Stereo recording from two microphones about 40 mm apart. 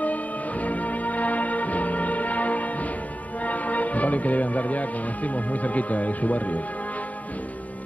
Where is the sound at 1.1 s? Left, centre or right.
Left.